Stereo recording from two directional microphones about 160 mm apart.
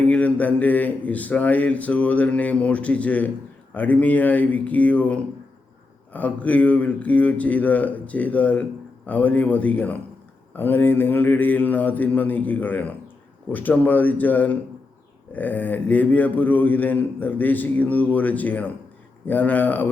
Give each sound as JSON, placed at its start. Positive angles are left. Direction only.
{"t": 0.0, "sound": "a man's voice", "side_deg": 10}